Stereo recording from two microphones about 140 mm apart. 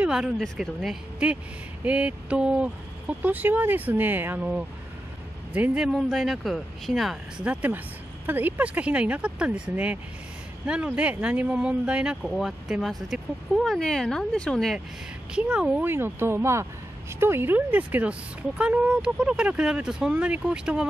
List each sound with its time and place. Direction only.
0.0 s speech: 5° right (ahead or behind)
15.3 s speech: 10° right (ahead or behind)